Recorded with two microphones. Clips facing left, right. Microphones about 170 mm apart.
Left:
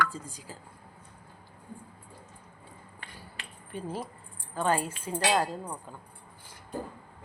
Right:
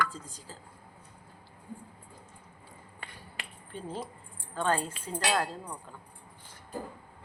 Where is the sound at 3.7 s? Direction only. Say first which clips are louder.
Left 2 dB; 10° left (ahead or behind).